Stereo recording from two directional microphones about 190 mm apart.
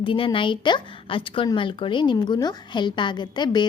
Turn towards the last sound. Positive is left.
turn(degrees=25)  # may be behind; listen again after turning